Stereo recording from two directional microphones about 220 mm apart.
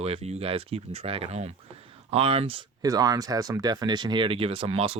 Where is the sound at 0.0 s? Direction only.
30° right (ahead or behind).